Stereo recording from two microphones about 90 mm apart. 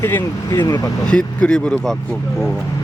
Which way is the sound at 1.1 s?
10° left (ahead or behind).